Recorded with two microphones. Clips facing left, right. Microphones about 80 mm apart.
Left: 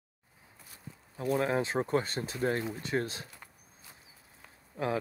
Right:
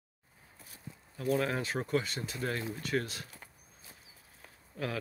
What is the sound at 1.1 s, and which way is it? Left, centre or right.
Speech, left.